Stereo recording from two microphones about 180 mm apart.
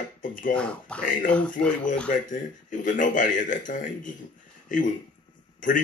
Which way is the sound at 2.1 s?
45° left (ahead or behind).